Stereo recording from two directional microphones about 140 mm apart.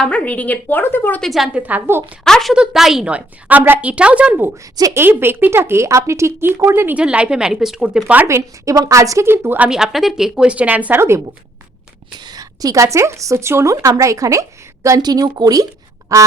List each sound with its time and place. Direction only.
0.0 s a woman's voice: 10° left (ahead or behind)
1.2 s speech: centre (ahead or behind)
2.2 s speech: centre (ahead or behind); by 9.6 s 15° right (ahead or behind)
9.6 s a woman's voice: 5° right (ahead or behind)
12.2 s a woman's voice: 25° right (ahead or behind)